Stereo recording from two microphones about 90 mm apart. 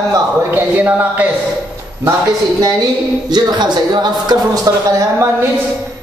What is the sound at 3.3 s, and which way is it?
Speech, 50° right (ahead or behind).